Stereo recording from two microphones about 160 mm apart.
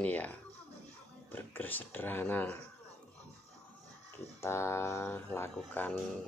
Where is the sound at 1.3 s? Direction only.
10° left (ahead or behind).